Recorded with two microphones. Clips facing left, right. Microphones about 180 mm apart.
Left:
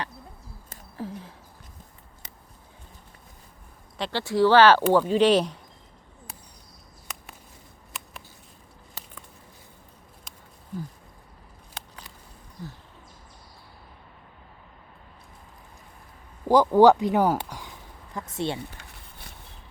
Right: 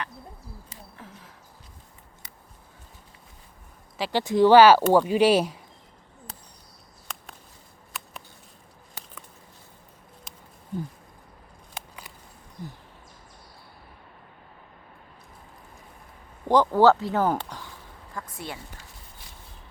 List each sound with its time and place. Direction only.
0.9 s a sound: 30° left (ahead or behind)
3.9 s speech: 5° right (ahead or behind)
4.2 s speech: 20° right (ahead or behind)
11.7 s a sound: 10° right (ahead or behind)
16.5 s speech: 10° left (ahead or behind)
18.1 s speech: 20° left (ahead or behind)